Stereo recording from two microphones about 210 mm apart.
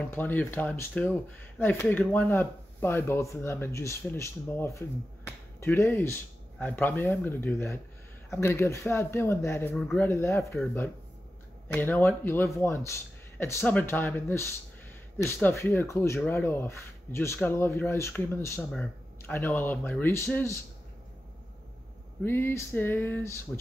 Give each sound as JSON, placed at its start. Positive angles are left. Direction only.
{"t": 0.0, "sound": "speech", "side_deg": 10}
{"t": 18.7, "sound": "a sound", "side_deg": 0}
{"t": 19.3, "sound": "speech", "side_deg": 10}
{"t": 22.2, "sound": "speech", "side_deg": 10}